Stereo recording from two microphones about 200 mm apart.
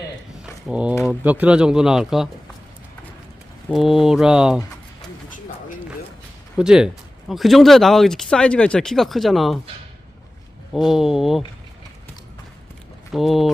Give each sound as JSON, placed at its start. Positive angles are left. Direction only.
{"t": 0.7, "sound": "speech", "side_deg": -5}
{"t": 3.7, "sound": "speech", "side_deg": 0}
{"t": 6.6, "sound": "speech", "side_deg": -5}
{"t": 10.8, "sound": "speech", "side_deg": 0}
{"t": 13.1, "sound": "speech", "side_deg": 0}